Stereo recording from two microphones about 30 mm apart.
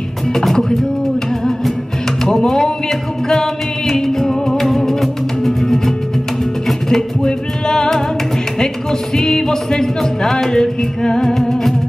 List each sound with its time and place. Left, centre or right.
0.3 s music: centre
2.2 s music: centre
9.1 s music: centre